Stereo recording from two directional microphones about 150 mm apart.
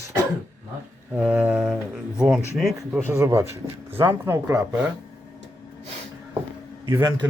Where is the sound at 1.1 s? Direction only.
10° right (ahead or behind).